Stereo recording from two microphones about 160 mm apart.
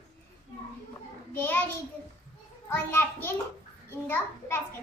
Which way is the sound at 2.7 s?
15° left (ahead or behind).